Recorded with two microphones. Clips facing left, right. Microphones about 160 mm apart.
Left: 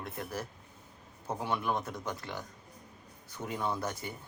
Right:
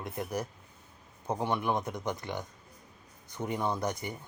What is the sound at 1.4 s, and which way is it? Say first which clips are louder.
A man's voice: right 2 dB; 20° right (ahead or behind).